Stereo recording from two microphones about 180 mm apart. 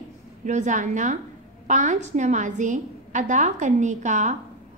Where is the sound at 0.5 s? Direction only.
45° right (ahead or behind).